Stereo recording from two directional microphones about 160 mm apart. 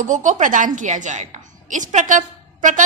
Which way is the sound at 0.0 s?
50° right (ahead or behind).